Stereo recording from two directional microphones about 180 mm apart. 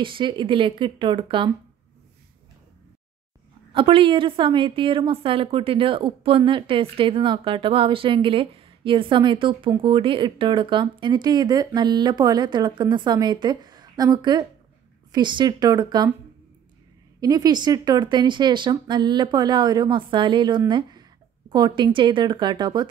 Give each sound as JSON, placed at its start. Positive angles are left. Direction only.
{"t": 0.0, "sound": "a woman's voice", "side_deg": -25}
{"t": 3.7, "sound": "a woman's voice", "side_deg": -30}
{"t": 17.2, "sound": "a woman's voice", "side_deg": -20}